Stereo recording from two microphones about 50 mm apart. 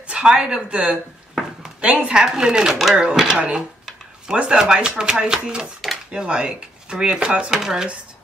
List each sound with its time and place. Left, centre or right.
0.1 s speech: centre
3.0 s speech: centre
7.5 s speech: centre